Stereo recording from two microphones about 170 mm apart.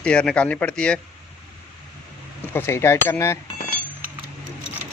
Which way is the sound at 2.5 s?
15° left (ahead or behind).